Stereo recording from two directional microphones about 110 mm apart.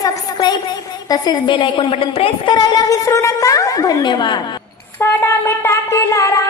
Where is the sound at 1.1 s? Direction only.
35° left (ahead or behind); by 2.6 s 55° left (ahead or behind).